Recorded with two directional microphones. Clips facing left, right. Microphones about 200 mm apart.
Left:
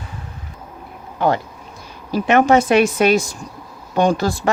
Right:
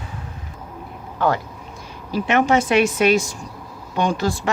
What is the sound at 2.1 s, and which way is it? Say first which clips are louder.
Speech: left 4 dB; 45° left (ahead or behind).